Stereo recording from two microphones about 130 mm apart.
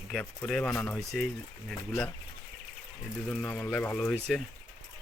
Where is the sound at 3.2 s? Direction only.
10° left (ahead or behind).